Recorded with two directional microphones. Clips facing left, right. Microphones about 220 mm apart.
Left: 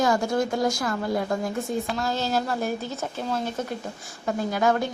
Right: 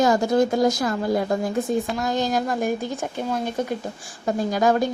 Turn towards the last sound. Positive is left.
turn(degrees=-35)  # may be behind; listen again after turning